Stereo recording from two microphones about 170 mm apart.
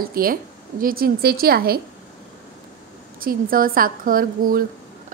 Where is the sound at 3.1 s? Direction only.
55° right (ahead or behind).